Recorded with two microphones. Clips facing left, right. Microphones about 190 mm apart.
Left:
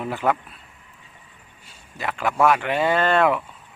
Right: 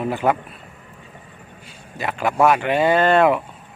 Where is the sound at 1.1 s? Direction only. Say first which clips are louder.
Right 9 dB; 60° right (ahead or behind).